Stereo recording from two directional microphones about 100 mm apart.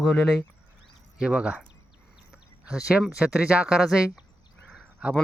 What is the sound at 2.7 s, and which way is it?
Speech, 5° right (ahead or behind).